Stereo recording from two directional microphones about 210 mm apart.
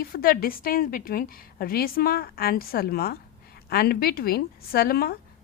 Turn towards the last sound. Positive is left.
turn(degrees=45)  # may be behind; listen again after turning